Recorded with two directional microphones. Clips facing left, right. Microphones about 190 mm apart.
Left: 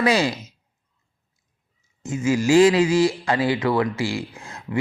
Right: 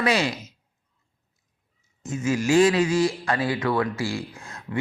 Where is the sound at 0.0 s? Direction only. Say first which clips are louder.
Left 3 dB; 35° left (ahead or behind).